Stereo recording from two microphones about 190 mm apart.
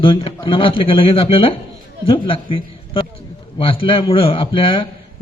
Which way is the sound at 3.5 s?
30° left (ahead or behind).